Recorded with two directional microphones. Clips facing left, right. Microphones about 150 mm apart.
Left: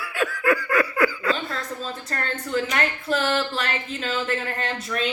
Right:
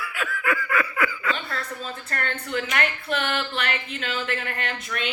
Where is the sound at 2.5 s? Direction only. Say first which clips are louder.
Left 3 dB; 30° left (ahead or behind).